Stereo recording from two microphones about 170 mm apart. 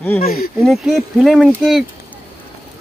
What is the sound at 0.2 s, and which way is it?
Speech, 60° left (ahead or behind).